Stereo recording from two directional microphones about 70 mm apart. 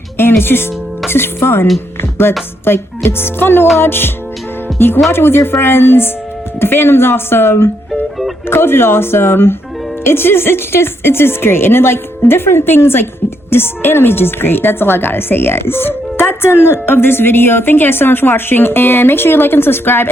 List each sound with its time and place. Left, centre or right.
0.2 s a woman's voice: left
2.0 s music: left
2.6 s a woman's voice: left